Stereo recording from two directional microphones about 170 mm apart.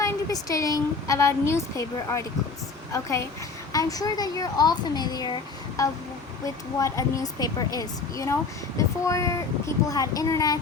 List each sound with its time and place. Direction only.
0.0 s a woman's voice: 20° left (ahead or behind)